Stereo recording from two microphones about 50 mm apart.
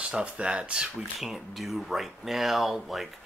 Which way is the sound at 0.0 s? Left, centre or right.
Centre.